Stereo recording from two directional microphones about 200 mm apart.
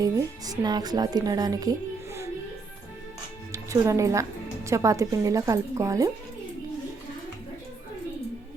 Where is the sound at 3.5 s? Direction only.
15° right (ahead or behind).